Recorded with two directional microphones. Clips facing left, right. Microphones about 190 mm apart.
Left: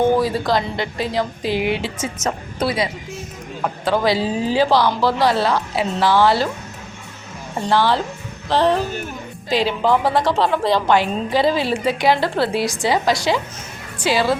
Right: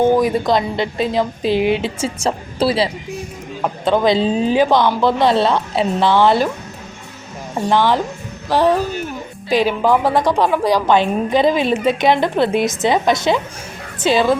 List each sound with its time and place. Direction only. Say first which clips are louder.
0.2 s speech: right 3 dB; 20° right (ahead or behind)
7.7 s a woman's voice: right 2 dB; 15° right (ahead or behind)